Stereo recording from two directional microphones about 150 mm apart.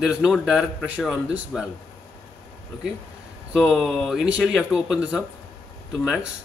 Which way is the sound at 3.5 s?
Centre (ahead or behind).